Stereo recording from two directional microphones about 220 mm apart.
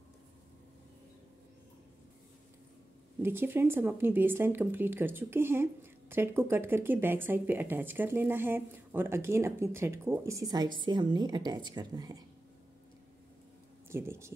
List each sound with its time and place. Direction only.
3.2 s a woman's voice: 10° right (ahead or behind)
13.8 s speech: 10° right (ahead or behind)